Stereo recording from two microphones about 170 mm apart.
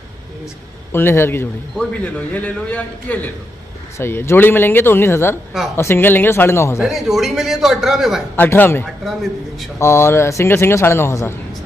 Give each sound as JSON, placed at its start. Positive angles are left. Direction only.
{"t": 0.9, "sound": "a man's voice", "side_deg": 15}
{"t": 6.8, "sound": "a man's voice", "side_deg": 0}
{"t": 8.4, "sound": "a man's voice", "side_deg": 15}
{"t": 8.8, "sound": "a man's voice", "side_deg": 0}
{"t": 9.8, "sound": "a man's voice", "side_deg": 15}